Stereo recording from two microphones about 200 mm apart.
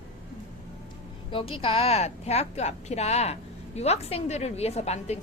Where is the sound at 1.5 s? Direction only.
25° left (ahead or behind).